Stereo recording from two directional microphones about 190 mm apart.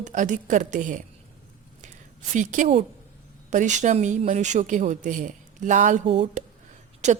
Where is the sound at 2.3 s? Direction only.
40° right (ahead or behind).